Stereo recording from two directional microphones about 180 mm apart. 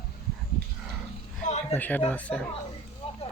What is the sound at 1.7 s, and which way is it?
Speech, 10° left (ahead or behind).